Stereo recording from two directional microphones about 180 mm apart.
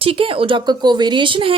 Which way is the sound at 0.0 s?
30° right (ahead or behind).